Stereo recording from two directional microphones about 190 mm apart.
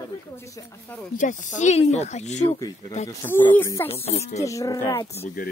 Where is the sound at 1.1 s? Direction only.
40° left (ahead or behind).